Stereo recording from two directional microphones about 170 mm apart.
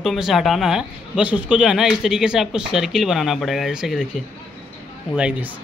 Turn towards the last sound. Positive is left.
turn(degrees=-5)  # may be behind; listen again after turning